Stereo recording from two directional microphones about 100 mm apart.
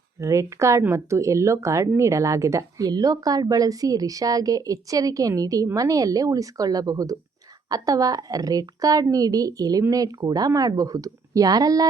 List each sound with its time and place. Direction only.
0.2 s a woman's voice: 30° right (ahead or behind)